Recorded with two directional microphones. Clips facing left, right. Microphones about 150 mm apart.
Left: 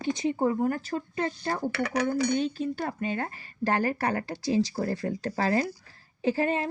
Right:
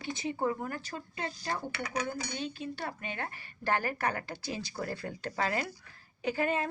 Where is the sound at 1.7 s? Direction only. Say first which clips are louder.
Left 8 dB; 65° left (ahead or behind).